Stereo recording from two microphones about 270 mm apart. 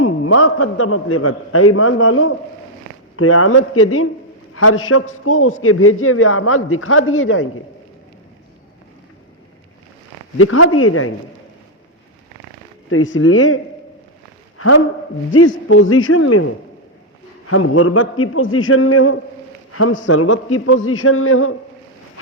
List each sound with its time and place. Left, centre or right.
0.0 s a man's voice: left
10.3 s a man's voice: left
12.9 s a man's voice: left
15.3 s a man's voice: left